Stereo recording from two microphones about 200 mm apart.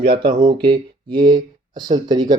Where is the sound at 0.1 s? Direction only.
25° right (ahead or behind).